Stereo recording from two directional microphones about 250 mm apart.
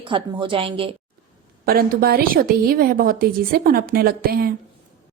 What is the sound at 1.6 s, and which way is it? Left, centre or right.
A woman's voice, right.